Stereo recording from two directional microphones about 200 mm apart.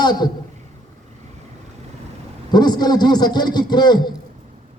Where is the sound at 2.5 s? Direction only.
20° left (ahead or behind).